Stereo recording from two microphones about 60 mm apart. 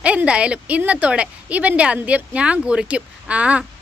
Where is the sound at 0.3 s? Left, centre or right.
Centre.